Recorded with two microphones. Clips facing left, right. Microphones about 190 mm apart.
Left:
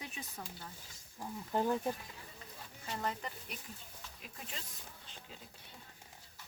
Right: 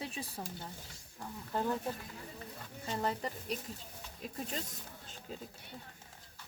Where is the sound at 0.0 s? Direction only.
30° right (ahead or behind).